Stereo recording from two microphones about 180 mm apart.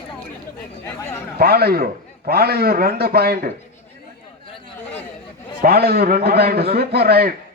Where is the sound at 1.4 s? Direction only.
60° right (ahead or behind).